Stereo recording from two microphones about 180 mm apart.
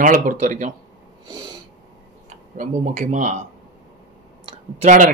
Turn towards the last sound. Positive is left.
turn(degrees=-40)  # may be behind; listen again after turning